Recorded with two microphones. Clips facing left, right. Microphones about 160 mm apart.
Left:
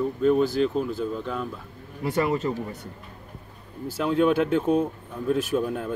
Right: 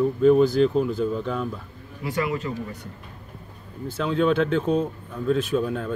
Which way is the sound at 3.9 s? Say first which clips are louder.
Even; 10° left (ahead or behind).